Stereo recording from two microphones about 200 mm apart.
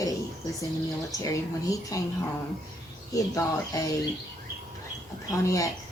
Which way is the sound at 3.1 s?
15° left (ahead or behind).